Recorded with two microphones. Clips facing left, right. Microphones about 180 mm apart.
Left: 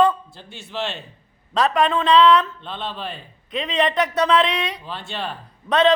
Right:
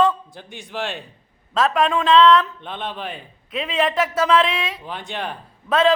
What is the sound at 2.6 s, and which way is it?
Speech, 15° right (ahead or behind).